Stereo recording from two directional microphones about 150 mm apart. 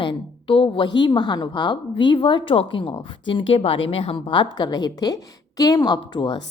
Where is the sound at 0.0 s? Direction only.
35° left (ahead or behind).